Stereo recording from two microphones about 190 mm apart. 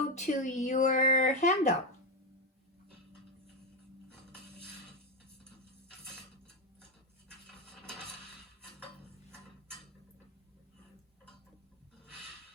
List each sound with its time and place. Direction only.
0.1 s speech: 40° left (ahead or behind)